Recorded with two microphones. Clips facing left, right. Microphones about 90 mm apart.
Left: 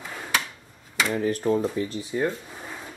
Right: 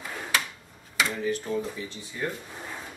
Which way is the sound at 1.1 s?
45° left (ahead or behind).